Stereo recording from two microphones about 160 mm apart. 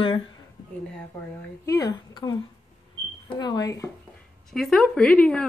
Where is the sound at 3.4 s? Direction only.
25° left (ahead or behind).